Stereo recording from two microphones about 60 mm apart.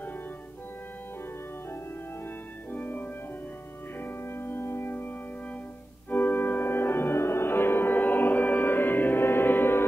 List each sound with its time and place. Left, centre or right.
2.7 s music: left
6.0 s organ: left